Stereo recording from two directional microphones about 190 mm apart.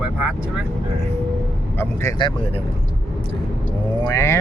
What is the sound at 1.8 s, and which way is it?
Speech, 15° left (ahead or behind).